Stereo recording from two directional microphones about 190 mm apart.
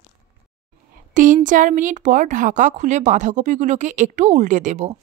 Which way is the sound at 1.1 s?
45° right (ahead or behind).